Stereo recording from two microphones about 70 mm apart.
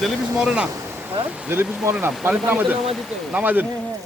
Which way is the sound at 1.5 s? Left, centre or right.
Right.